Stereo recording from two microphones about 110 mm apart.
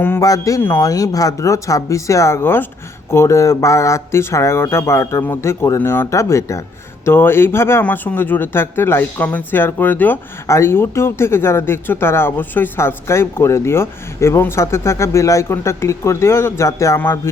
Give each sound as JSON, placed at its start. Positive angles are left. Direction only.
{"t": 0.2, "sound": "speech", "side_deg": 30}